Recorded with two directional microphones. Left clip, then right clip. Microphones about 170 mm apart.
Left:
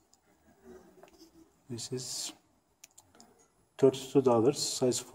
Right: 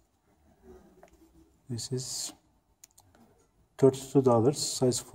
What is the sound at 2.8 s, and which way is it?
Clicking, 25° right (ahead or behind).